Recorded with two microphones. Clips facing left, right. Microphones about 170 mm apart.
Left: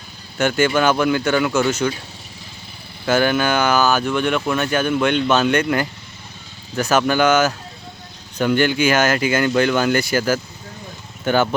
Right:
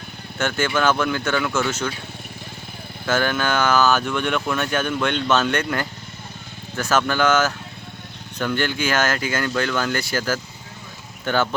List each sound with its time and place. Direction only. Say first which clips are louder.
0.3 s speech: left 5 dB; 15° left (ahead or behind)
3.1 s speech: left 4 dB; 10° left (ahead or behind)